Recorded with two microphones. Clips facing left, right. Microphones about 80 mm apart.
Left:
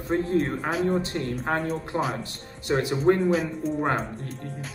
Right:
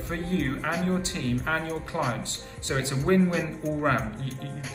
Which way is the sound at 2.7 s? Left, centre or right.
Centre.